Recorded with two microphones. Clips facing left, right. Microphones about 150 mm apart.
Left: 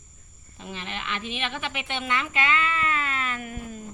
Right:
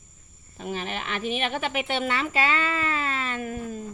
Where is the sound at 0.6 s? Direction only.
45° right (ahead or behind).